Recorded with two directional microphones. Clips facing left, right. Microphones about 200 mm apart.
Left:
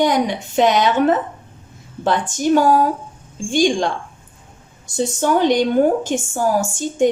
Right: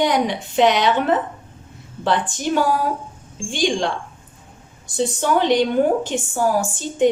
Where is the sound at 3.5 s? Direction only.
45° left (ahead or behind).